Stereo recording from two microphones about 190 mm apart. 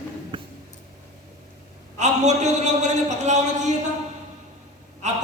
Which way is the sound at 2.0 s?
40° right (ahead or behind).